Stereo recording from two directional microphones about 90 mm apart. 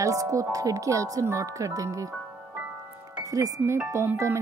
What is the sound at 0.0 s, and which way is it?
Speech, 35° right (ahead or behind).